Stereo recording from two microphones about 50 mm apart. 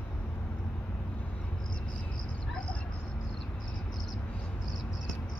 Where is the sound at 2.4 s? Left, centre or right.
Centre.